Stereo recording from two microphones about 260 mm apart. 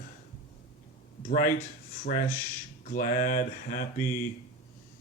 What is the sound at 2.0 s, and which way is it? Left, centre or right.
Speech, left.